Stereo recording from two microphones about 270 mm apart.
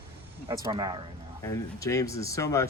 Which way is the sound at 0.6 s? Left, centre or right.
Centre.